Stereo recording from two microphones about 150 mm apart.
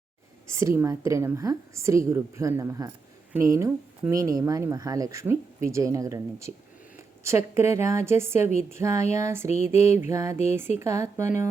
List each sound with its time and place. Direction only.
0.5 s a woman's voice: 20° right (ahead or behind)
9.7 s mantra: 50° left (ahead or behind)
10.0 s a woman's voice: 20° right (ahead or behind)
10.3 s mantra: 50° left (ahead or behind)
10.8 s a woman's voice: 20° right (ahead or behind)